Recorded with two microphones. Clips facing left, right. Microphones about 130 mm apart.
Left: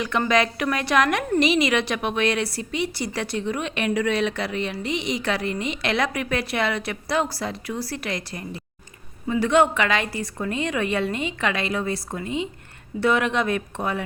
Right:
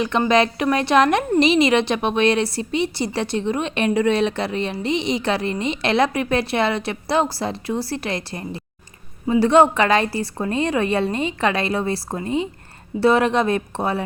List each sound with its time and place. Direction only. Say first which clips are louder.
0.0 s a woman's voice: right 4 dB; 25° right (ahead or behind)